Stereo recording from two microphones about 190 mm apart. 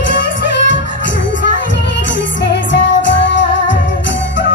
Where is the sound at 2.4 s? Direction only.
70° left (ahead or behind).